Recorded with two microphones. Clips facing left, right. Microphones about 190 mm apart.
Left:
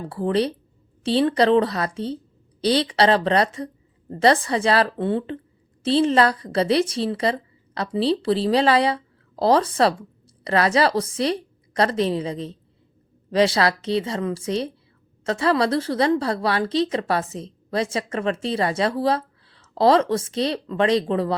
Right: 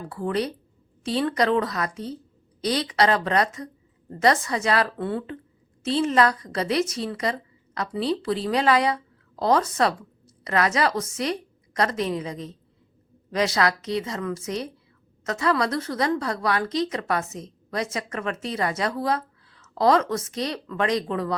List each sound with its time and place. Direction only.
0.1 s a woman's voice: 30° left (ahead or behind)